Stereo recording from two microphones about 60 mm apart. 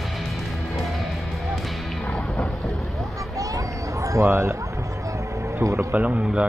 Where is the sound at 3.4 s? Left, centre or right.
Right.